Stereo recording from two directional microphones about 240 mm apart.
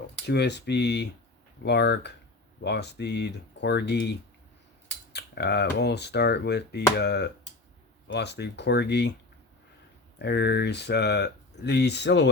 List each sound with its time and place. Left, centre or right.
0.3 s speech: left
5.1 s speech: left
10.2 s speech: left